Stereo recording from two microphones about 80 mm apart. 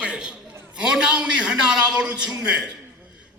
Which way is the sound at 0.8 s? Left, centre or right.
Centre.